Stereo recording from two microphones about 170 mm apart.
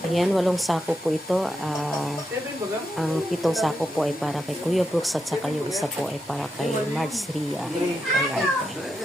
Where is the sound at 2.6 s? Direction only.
15° right (ahead or behind).